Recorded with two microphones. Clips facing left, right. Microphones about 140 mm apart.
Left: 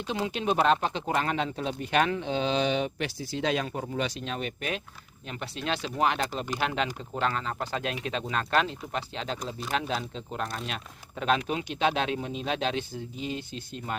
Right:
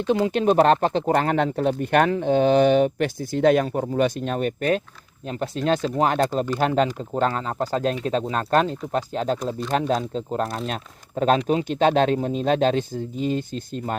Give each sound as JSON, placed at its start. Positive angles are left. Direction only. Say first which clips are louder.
{"t": 0.1, "sound": "speech", "louder": "right 9 dB", "side_deg": -50}